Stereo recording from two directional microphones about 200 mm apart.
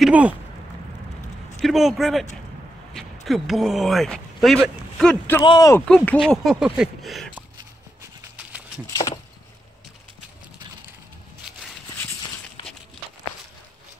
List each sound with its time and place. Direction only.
0.0 s speech: 5° right (ahead or behind)
1.6 s speech: centre (ahead or behind)
5.4 s speech: 20° left (ahead or behind)
5.9 s speech: 5° left (ahead or behind)
8.4 s a sound: 5° right (ahead or behind)
8.9 s a sound: 20° left (ahead or behind)